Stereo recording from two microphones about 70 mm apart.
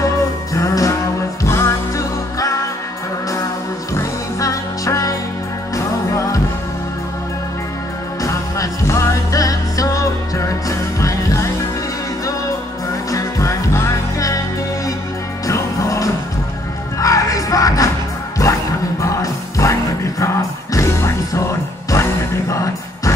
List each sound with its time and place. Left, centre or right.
0.6 s music: left
3.9 s music: left
8.2 s music: left
13.1 s music: left
15.4 s music: left